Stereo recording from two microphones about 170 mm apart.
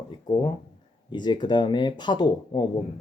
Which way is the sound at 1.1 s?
25° left (ahead or behind).